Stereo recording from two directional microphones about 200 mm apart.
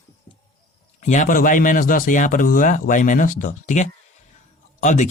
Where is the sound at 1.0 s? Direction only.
40° left (ahead or behind).